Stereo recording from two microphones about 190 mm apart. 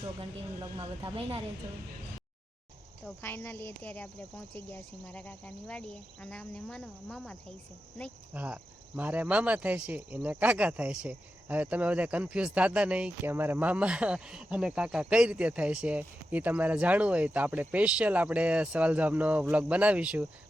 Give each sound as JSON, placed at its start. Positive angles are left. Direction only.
{"t": 0.0, "sound": "speech", "side_deg": -25}
{"t": 3.2, "sound": "speech", "side_deg": 10}
{"t": 6.3, "sound": "cricket", "side_deg": 5}
{"t": 8.3, "sound": "speech", "side_deg": -5}